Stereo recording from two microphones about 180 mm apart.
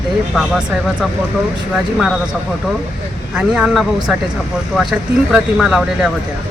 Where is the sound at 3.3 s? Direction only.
5° right (ahead or behind).